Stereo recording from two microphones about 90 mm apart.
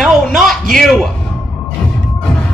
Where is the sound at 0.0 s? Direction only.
5° left (ahead or behind).